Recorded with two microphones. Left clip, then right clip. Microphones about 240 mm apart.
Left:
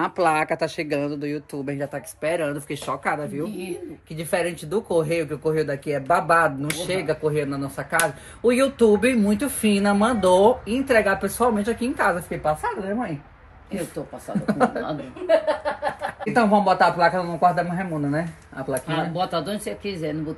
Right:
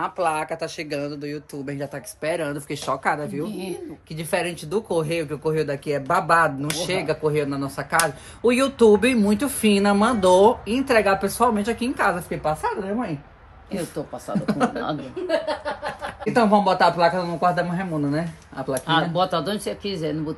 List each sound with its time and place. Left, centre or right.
0.5 s speech: left
2.2 s speech: centre
14.4 s speech: centre
15.2 s speech: left
16.3 s speech: centre
18.9 s speech: centre